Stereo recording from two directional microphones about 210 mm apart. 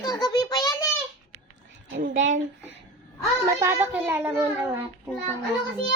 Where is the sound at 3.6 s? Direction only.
10° right (ahead or behind).